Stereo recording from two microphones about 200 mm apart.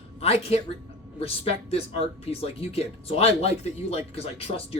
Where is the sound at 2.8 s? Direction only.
30° left (ahead or behind).